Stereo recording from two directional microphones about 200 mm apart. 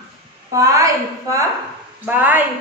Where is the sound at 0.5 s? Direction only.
15° right (ahead or behind).